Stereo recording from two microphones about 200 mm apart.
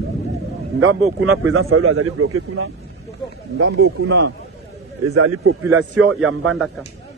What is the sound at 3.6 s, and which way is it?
Speech, 75° right (ahead or behind).